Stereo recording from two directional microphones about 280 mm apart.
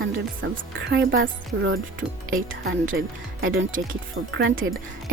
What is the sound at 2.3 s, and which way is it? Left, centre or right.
Speech, right.